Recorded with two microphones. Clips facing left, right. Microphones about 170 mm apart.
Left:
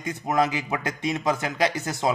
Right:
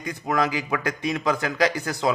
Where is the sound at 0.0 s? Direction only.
20° left (ahead or behind).